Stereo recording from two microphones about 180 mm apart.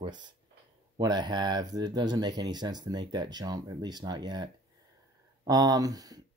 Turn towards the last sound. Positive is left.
turn(degrees=-20)  # may be behind; listen again after turning